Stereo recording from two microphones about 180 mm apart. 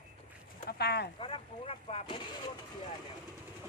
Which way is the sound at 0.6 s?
65° left (ahead or behind).